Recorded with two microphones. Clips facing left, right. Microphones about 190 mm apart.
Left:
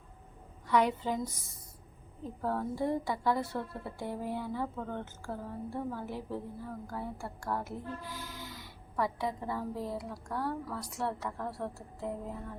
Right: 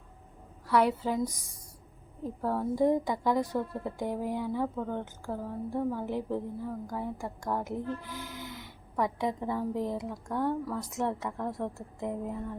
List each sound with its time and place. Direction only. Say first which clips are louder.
0.7 s a woman's voice: right 2 dB; 5° right (ahead or behind)